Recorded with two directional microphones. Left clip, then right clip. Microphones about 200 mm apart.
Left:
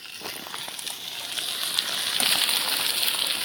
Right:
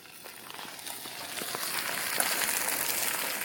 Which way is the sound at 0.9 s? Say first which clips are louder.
Left 6 dB; centre (ahead or behind).